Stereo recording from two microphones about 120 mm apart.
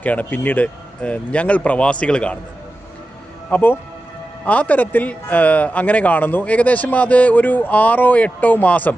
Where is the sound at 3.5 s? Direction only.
15° left (ahead or behind).